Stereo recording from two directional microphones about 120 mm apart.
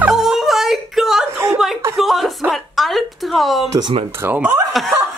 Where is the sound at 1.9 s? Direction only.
Centre (ahead or behind).